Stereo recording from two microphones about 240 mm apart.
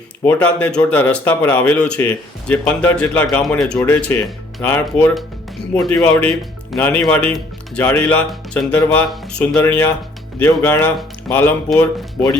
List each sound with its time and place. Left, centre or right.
0.3 s a man's voice: centre